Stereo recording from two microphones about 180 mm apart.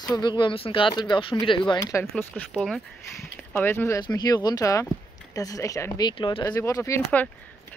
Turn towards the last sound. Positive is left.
turn(degrees=10)  # may be behind; listen again after turning